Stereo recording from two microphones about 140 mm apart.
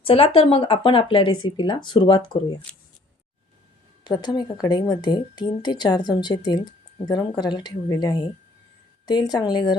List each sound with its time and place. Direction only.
0.0 s speech: 40° left (ahead or behind)
2.7 s speech: 10° left (ahead or behind)
4.0 s speech: 30° left (ahead or behind)